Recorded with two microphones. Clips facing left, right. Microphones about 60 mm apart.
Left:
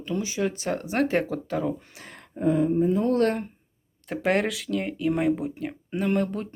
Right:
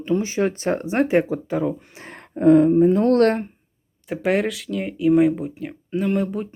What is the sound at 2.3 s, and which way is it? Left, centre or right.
Speech, right.